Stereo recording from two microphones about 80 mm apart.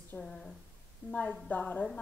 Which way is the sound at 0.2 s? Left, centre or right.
Centre.